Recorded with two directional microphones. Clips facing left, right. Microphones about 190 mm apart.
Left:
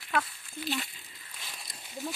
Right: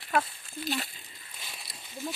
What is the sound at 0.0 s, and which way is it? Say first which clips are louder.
Speech: right 3 dB; 35° right (ahead or behind).